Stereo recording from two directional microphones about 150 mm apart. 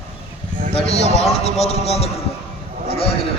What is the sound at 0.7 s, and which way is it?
A man's voice, 45° left (ahead or behind).